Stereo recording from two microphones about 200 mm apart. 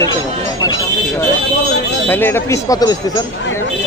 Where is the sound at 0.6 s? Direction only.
20° left (ahead or behind).